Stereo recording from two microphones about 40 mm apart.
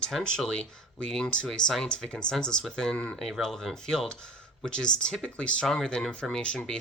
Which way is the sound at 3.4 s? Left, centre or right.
Centre.